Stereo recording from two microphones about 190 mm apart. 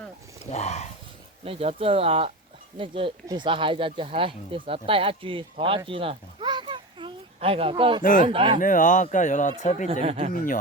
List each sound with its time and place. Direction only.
0.5 s speech: 35° left (ahead or behind)
1.5 s a child's voice: 30° right (ahead or behind)
8.0 s speech: 45° left (ahead or behind)
8.3 s speech: 30° right (ahead or behind)
8.5 s speech: 45° left (ahead or behind)
9.9 s speech: 35° right (ahead or behind)
10.3 s speech: 45° left (ahead or behind)